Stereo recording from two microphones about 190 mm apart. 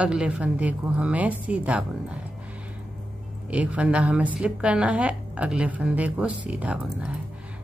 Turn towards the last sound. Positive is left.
turn(degrees=-5)  # may be behind; listen again after turning